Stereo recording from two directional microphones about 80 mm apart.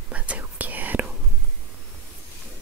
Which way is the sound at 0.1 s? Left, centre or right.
Centre.